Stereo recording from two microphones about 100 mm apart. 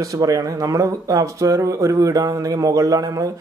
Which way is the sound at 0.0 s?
35° right (ahead or behind).